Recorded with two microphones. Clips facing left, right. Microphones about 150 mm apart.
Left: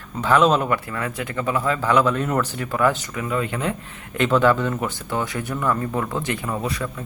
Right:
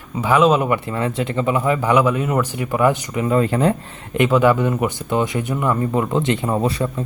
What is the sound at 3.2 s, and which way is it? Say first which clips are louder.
Speech: right 8 dB; 35° right (ahead or behind).